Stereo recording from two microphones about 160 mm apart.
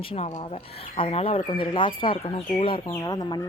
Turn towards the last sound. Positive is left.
turn(degrees=25)  # may be behind; listen again after turning